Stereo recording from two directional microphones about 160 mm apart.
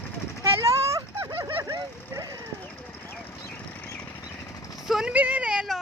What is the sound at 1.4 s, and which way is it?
Vehicle, 20° right (ahead or behind).